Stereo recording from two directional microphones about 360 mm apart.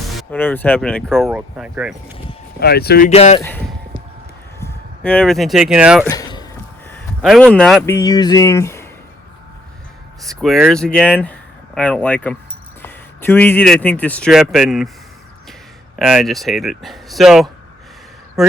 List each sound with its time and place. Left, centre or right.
0.1 s speech: centre
2.6 s speech: left; by 3.6 s centre
4.6 s speech: centre
6.1 s speech: centre
10.2 s a man's voice: centre
16.0 s a man's voice: centre